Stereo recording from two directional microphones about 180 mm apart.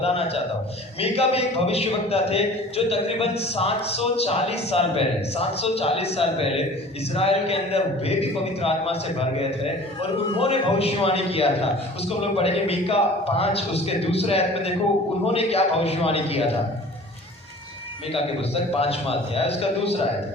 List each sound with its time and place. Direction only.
0.0 s a man's voice: 35° left (ahead or behind)
18.1 s a man's voice: 35° left (ahead or behind)